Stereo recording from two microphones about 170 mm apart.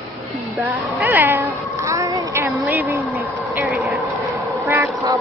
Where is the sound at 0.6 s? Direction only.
10° right (ahead or behind).